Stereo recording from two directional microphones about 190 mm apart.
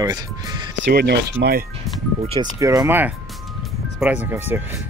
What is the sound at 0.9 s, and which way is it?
Speech, 55° right (ahead or behind).